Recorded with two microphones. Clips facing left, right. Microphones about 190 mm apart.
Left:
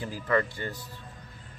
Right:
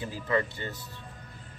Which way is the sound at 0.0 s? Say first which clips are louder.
Left 2 dB; 20° right (ahead or behind).